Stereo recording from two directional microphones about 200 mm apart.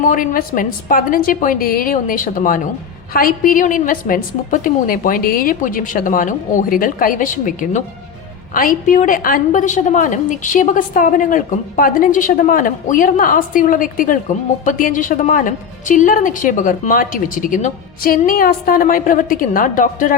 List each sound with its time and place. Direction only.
0.0 s a woman's voice: 40° left (ahead or behind)
8.5 s a woman's voice: 40° left (ahead or behind)